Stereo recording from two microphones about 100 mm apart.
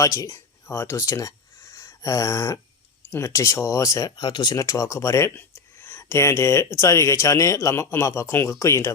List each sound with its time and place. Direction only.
0.0 s speech: 35° left (ahead or behind)
4.2 s speech: 50° left (ahead or behind)
4.5 s speech: 35° left (ahead or behind)